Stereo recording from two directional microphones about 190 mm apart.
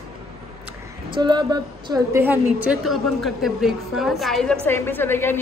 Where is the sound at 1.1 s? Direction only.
25° right (ahead or behind).